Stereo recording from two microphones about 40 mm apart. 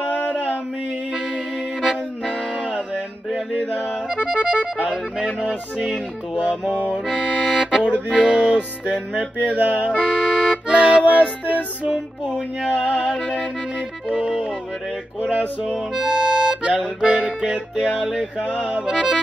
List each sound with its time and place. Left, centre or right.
1.1 s music: centre
4.1 s music: right
7.1 s accordion: centre
8.3 s music: right
9.4 s music: right
9.9 s accordion: centre
11.4 s music: right
11.9 s music: centre
12.7 s music: left
13.7 s accordion: centre
15.6 s harmonica: centre
17.0 s music: right
18.9 s accordion: centre